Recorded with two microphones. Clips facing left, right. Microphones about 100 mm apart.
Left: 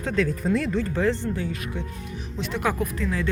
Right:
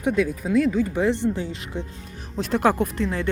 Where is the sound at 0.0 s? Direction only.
15° right (ahead or behind).